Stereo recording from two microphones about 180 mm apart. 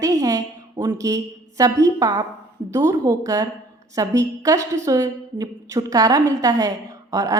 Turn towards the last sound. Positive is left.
turn(degrees=-20)  # may be behind; listen again after turning